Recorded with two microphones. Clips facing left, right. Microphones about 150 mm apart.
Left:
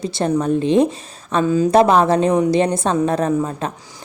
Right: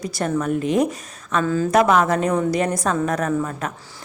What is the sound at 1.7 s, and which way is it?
A woman's voice, 30° left (ahead or behind).